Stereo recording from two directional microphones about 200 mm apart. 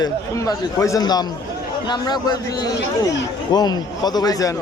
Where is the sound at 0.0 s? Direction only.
15° left (ahead or behind).